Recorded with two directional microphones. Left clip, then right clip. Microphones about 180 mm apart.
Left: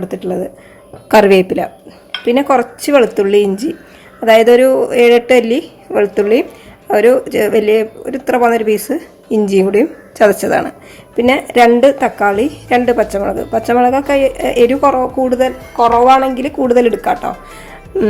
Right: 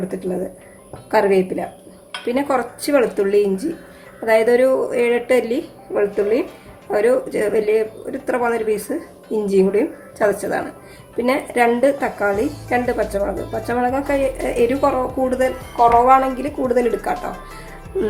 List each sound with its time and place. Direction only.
1.1 s a woman's voice: 45° left (ahead or behind)